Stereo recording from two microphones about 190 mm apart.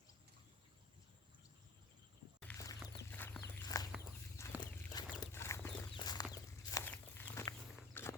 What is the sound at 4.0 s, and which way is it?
Chicken, 15° left (ahead or behind).